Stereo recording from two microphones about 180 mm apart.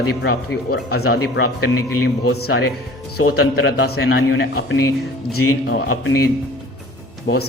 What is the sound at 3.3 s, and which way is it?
A man's voice, 75° left (ahead or behind).